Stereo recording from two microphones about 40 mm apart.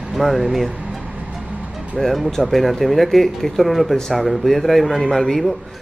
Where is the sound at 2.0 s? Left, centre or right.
Centre.